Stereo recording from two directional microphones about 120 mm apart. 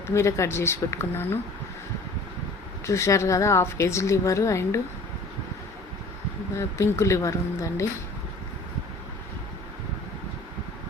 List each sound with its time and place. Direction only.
0.1 s a woman's voice: 25° left (ahead or behind)
2.8 s a woman's voice: 25° left (ahead or behind)
6.6 s a woman's voice: 25° left (ahead or behind)